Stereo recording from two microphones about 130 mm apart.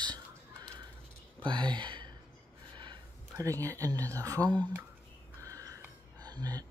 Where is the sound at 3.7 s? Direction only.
25° right (ahead or behind).